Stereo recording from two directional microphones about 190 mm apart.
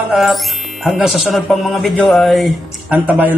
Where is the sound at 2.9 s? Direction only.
10° right (ahead or behind).